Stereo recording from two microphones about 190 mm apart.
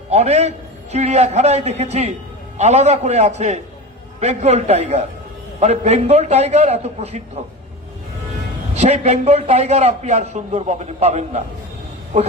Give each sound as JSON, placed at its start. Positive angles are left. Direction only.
{"t": 0.1, "sound": "a man's voice", "side_deg": -35}
{"t": 8.7, "sound": "a man's voice", "side_deg": -35}